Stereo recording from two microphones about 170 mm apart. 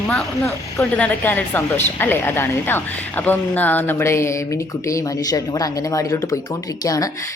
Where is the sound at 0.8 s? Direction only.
10° left (ahead or behind).